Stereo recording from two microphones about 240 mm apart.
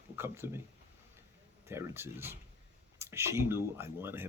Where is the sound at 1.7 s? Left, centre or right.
Centre.